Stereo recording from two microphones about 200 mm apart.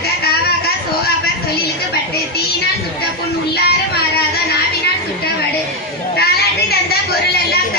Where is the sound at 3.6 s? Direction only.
50° left (ahead or behind).